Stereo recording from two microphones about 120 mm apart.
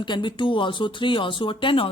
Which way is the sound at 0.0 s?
40° left (ahead or behind).